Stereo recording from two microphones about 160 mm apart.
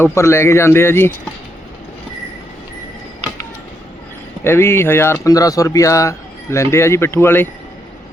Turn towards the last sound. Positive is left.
turn(degrees=15)  # may be behind; listen again after turning